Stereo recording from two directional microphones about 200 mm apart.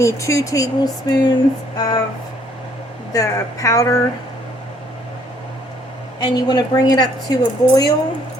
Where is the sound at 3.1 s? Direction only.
15° left (ahead or behind).